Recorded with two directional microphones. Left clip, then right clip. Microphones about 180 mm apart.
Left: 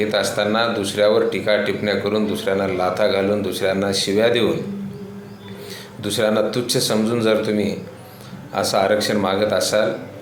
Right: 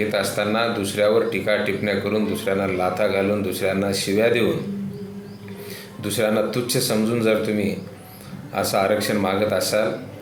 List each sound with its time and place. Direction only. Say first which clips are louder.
0.0 s a man's voice: left 3 dB; 10° right (ahead or behind)
6.0 s a man's voice: left 2 dB; 10° right (ahead or behind)